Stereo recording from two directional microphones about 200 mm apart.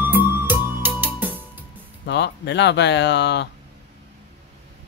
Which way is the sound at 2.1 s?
60° left (ahead or behind).